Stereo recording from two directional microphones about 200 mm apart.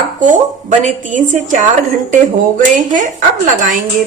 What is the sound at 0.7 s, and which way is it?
A woman's voice, 35° right (ahead or behind).